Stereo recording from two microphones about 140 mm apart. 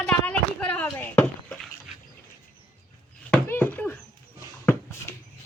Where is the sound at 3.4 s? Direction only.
15° left (ahead or behind).